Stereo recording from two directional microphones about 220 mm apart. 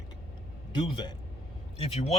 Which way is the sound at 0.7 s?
20° left (ahead or behind).